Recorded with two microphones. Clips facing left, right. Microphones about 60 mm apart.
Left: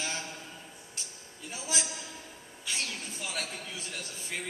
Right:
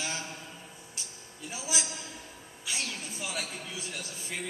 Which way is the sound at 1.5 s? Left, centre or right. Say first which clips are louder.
Even; centre.